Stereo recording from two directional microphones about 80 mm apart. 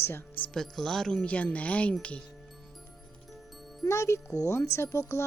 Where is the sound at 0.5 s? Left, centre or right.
Centre.